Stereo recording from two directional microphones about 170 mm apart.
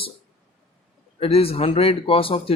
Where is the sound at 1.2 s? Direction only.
35° left (ahead or behind).